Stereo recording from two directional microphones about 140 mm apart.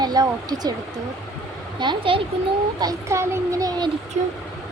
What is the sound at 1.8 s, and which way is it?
Speech, 35° right (ahead or behind).